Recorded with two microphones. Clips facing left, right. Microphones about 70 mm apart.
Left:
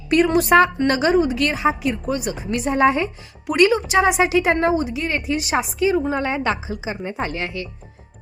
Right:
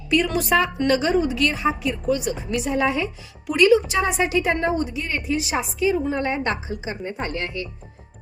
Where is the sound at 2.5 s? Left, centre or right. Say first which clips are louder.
Left 5 dB; left.